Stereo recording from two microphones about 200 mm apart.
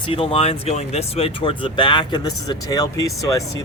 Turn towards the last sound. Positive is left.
turn(degrees=15)  # may be behind; listen again after turning